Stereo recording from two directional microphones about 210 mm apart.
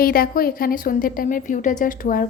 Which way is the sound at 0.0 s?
45° left (ahead or behind).